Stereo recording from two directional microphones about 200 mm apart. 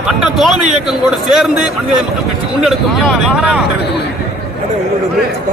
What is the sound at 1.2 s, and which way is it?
Speech, centre (ahead or behind).